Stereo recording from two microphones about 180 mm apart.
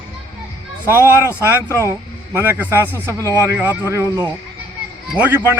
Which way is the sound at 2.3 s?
15° right (ahead or behind).